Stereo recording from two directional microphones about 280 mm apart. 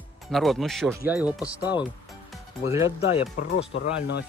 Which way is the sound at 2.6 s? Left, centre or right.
Centre.